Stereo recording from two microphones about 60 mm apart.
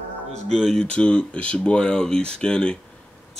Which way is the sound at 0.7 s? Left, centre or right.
Centre.